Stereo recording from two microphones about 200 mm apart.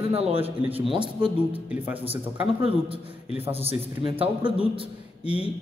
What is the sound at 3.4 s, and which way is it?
A man's voice, 30° right (ahead or behind).